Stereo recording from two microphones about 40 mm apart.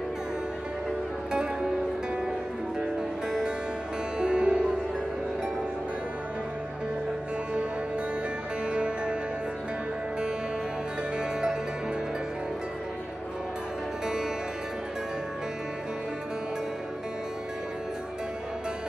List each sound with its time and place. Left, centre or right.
3.3 s music: centre
8.6 s music: right